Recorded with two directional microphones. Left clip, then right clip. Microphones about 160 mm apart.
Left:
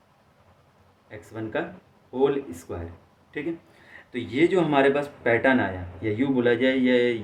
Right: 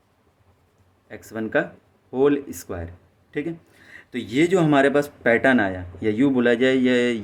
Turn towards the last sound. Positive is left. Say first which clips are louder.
# right 2 dB
turn(degrees=-65)  # may be behind; listen again after turning